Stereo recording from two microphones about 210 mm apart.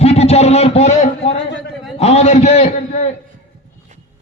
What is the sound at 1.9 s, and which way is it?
A man's voice, 30° left (ahead or behind).